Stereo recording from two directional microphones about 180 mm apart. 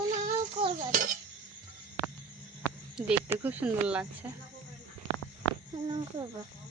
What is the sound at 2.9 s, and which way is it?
Speech, 5° right (ahead or behind).